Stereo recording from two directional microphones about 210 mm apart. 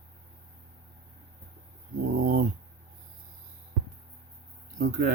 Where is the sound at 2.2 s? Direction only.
40° right (ahead or behind).